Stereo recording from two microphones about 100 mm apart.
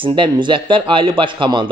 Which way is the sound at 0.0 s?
55° right (ahead or behind).